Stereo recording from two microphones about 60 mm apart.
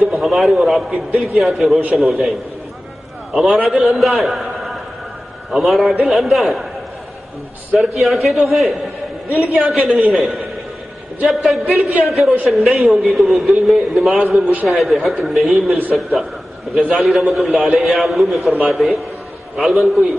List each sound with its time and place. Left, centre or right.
0.0 s a man's voice: centre
3.3 s a man's voice: centre
7.7 s a man's voice: centre
14.4 s a man's voice: right
14.7 s a man's voice: centre